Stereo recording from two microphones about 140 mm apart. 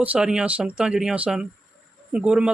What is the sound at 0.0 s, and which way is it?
Speech, 10° right (ahead or behind).